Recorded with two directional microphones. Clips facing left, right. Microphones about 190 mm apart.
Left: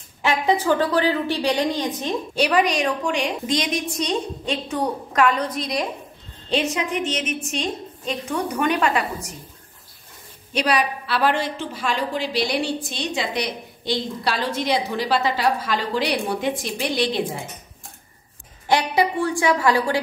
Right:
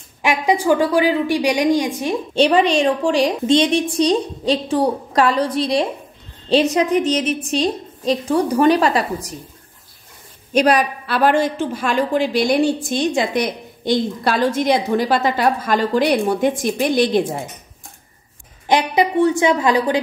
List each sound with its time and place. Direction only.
0.2 s a woman's voice: 15° right (ahead or behind)
2.3 s a woman's voice: 25° right (ahead or behind)
10.5 s a woman's voice: 45° right (ahead or behind)
18.7 s a woman's voice: 20° right (ahead or behind)